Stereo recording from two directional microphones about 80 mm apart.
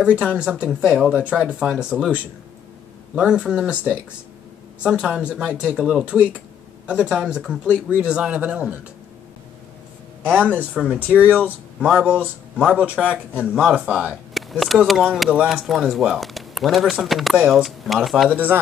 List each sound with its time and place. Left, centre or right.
0.0 s speech: centre
5.3 s speech: centre
10.3 s speech: centre
14.0 s a sound: centre
14.9 s speech: centre
15.2 s speech: centre
15.5 s speech: centre
18.3 s speech: right